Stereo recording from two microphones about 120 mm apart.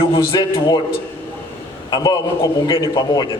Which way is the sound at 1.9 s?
35° left (ahead or behind).